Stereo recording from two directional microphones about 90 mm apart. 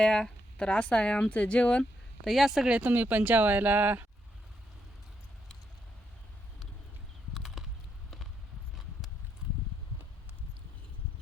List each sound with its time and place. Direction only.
0.0 s speech: 10° left (ahead or behind)
2.2 s speech: centre (ahead or behind)
2.7 s speech: 20° right (ahead or behind)
7.3 s a sound: 5° right (ahead or behind)